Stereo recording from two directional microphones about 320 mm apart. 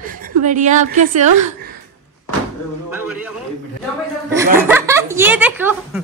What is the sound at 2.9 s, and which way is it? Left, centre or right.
Speech, left.